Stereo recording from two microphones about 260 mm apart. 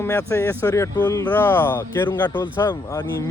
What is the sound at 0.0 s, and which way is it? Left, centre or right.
Speech, centre.